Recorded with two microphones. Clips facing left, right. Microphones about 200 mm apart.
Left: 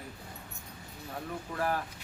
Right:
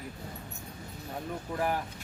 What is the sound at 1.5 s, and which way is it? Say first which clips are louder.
Speech: right 1 dB; 15° right (ahead or behind).